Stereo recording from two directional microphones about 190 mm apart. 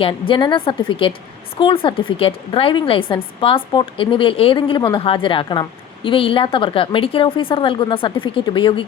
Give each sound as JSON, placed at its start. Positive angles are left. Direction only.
{"t": 0.0, "sound": "a woman's voice", "side_deg": 25}